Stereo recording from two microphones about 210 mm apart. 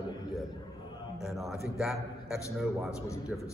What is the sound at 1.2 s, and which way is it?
A man's voice, centre (ahead or behind).